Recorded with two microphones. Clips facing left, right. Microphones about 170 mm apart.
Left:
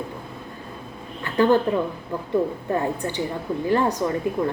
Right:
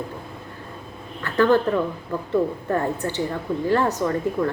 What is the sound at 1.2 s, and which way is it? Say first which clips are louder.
A woman's voice: even; 15° left (ahead or behind).